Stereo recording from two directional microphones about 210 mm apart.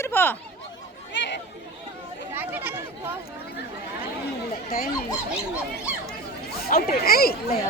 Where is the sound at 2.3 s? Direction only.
10° right (ahead or behind).